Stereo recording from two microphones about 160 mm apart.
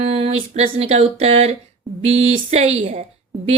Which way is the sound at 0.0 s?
40° right (ahead or behind).